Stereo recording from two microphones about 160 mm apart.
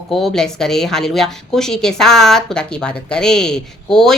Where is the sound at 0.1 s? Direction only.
Centre (ahead or behind).